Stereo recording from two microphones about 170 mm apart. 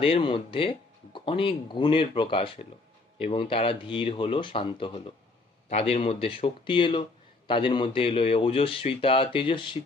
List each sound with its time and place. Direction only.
0.0 s speech: 35° left (ahead or behind)